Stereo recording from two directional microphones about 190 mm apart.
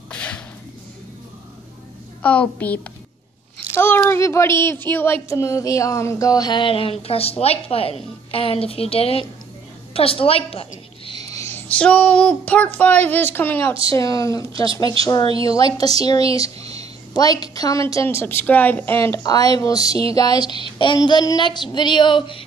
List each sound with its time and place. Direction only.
0.1 s a sound: 5° left (ahead or behind)
2.2 s a woman's voice: 5° left (ahead or behind); by 11.2 s 30° left (ahead or behind)
11.3 s a woman's voice: 10° left (ahead or behind)
17.1 s a woman's voice: 20° left (ahead or behind)